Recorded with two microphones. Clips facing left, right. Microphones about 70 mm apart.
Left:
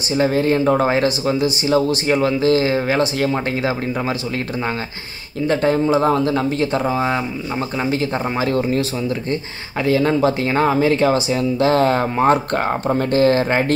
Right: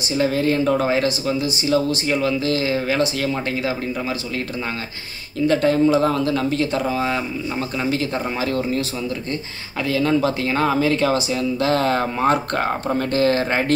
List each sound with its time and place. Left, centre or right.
0.2 s speech: left
5.5 s speech: left